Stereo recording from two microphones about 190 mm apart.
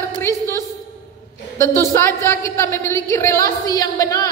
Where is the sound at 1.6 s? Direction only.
15° left (ahead or behind).